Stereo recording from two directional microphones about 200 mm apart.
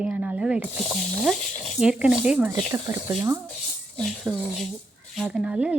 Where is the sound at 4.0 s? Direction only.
Centre (ahead or behind).